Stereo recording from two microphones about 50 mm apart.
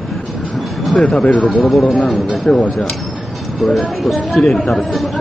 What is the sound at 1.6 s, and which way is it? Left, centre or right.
Speech, centre.